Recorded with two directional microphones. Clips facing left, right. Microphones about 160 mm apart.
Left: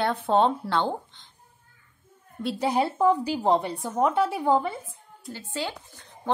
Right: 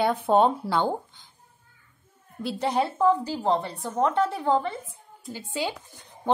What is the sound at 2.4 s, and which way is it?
A woman's voice, 5° left (ahead or behind).